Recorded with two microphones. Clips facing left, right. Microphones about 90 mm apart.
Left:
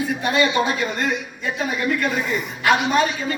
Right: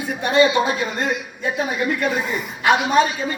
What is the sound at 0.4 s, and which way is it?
Speech, 5° right (ahead or behind).